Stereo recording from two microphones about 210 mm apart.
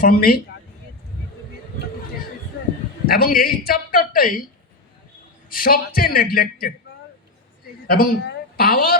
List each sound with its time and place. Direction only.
0.0 s speech: 45° left (ahead or behind)
3.1 s speech: 45° left (ahead or behind)
5.5 s speech: 45° left (ahead or behind)
7.9 s a woman's voice: 45° left (ahead or behind)